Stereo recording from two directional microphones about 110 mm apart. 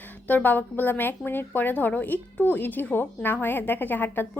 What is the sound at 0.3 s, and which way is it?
A woman's voice, 15° left (ahead or behind).